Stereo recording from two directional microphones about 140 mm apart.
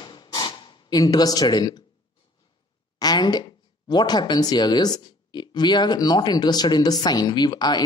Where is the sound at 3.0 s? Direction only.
30° left (ahead or behind).